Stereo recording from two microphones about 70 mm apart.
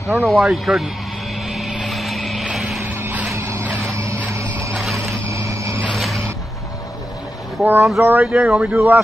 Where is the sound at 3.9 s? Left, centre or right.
Right.